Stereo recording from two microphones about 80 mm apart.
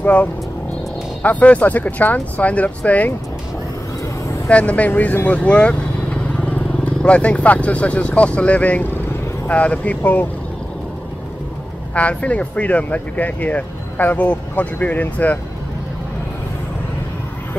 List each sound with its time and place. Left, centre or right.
0.0 s speech: centre
4.5 s speech: centre
11.9 s speech: centre